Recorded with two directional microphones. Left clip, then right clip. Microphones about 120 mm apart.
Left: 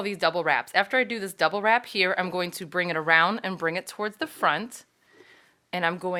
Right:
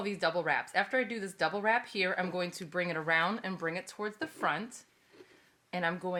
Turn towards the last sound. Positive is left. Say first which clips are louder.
# left 7 dB
turn(degrees=40)  # may be behind; listen again after turning